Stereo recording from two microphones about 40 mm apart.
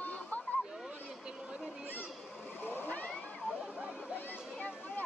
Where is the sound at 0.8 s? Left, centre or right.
Right.